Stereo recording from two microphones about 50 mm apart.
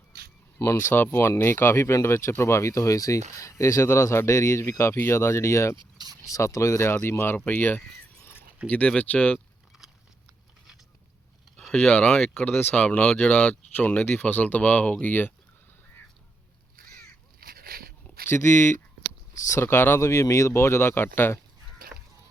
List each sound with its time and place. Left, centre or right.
0.6 s speech: left
0.9 s speech: left
6.3 s speech: left
7.1 s speech: left
7.3 s speech: left
8.6 s speech: left
11.5 s speech: centre
12.5 s speech: left
13.0 s speech: centre
14.0 s speech: left
18.3 s speech: left
19.3 s speech: left
19.6 s speech: left
20.0 s speech: left